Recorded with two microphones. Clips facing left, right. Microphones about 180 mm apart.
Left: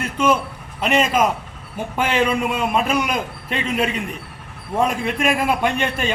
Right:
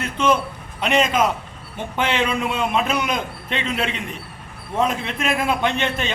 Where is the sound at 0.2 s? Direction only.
10° left (ahead or behind).